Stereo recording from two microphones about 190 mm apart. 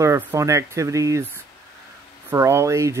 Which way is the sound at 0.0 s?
15° right (ahead or behind).